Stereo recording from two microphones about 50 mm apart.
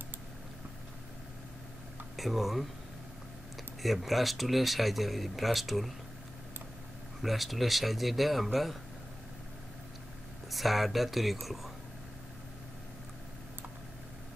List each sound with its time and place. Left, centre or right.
2.1 s speech: centre
3.8 s speech: centre
7.2 s speech: centre
10.5 s speech: centre